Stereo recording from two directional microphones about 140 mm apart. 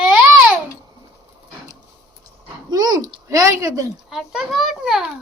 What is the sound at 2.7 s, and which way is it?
Speech, 30° right (ahead or behind).